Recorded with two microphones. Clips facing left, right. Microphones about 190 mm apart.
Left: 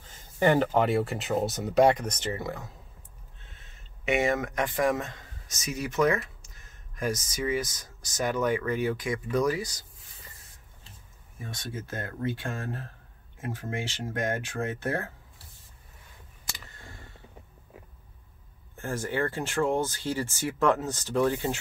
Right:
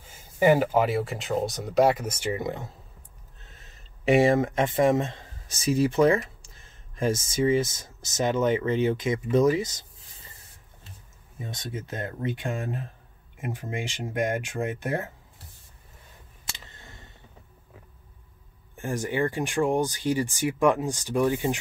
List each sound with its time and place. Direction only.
0.0 s speech: 10° right (ahead or behind)
3.4 s speech: 40° right (ahead or behind); by 9.8 s 20° right (ahead or behind)
11.3 s speech: 20° right (ahead or behind)
16.5 s a sound: 25° right (ahead or behind)
18.8 s speech: 15° right (ahead or behind)